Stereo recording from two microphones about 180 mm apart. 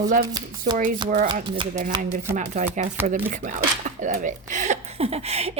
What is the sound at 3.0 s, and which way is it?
Chopping, 45° right (ahead or behind).